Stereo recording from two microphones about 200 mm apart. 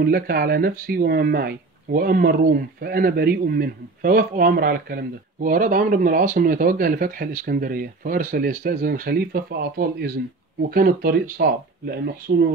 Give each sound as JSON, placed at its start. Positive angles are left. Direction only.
{"t": 0.0, "sound": "speech", "side_deg": -50}